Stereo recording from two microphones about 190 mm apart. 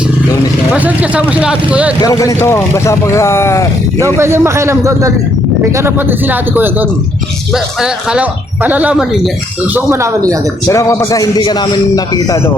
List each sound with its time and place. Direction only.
0.7 s speech: 10° right (ahead or behind)
2.0 s speech: 20° left (ahead or behind)
4.2 s speech: 15° right (ahead or behind)
10.7 s a man's voice: 15° left (ahead or behind)